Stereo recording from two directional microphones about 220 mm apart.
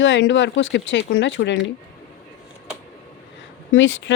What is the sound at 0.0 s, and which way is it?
Speech, 55° left (ahead or behind).